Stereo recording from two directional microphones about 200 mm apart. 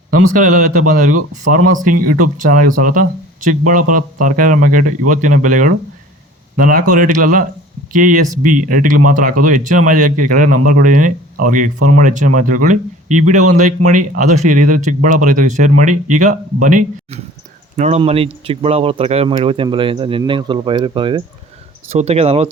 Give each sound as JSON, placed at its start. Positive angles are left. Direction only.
{"t": 0.1, "sound": "speech", "side_deg": -40}